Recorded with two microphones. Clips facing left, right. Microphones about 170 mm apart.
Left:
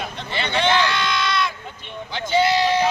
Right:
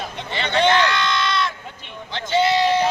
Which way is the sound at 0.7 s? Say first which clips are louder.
Right 1 dB; 5° left (ahead or behind).